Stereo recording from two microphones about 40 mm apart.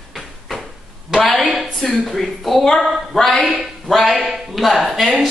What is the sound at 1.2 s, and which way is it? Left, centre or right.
Speech, centre.